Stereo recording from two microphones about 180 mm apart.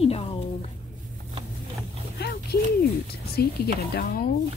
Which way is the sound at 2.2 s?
65° left (ahead or behind).